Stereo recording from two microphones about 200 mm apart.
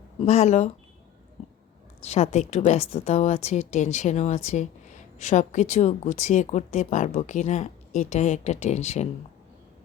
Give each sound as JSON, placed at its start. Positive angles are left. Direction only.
{"t": 0.2, "sound": "speech", "side_deg": 35}
{"t": 2.0, "sound": "speech", "side_deg": 30}